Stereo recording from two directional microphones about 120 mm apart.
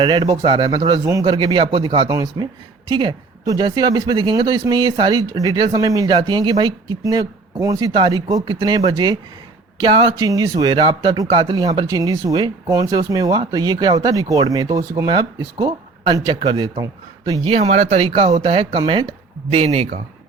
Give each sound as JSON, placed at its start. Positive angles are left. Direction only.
{"t": 0.0, "sound": "speech", "side_deg": -35}
{"t": 2.0, "sound": "speech", "side_deg": -35}
{"t": 17.4, "sound": "speech", "side_deg": -60}